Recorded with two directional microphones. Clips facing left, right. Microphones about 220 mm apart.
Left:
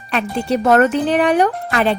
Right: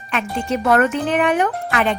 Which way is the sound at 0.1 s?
35° left (ahead or behind).